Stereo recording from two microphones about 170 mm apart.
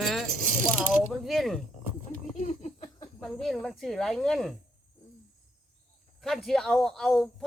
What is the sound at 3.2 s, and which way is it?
A man's voice, centre (ahead or behind).